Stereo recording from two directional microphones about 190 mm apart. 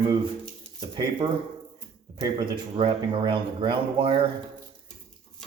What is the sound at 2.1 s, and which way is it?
Speech, 25° right (ahead or behind).